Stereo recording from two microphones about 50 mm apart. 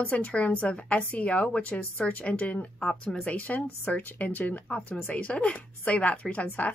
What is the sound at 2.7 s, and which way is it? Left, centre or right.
Speech, centre.